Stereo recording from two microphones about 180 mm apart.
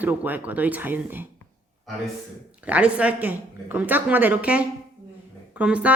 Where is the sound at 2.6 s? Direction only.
5° right (ahead or behind).